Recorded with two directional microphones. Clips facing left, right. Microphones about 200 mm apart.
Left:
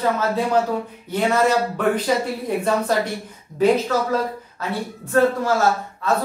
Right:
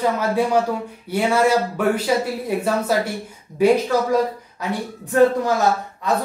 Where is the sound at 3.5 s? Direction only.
10° right (ahead or behind).